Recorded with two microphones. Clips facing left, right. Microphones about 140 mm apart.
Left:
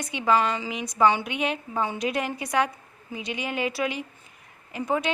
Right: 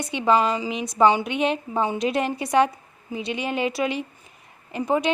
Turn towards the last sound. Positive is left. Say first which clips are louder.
# right 4 dB
turn(degrees=-20)  # may be behind; listen again after turning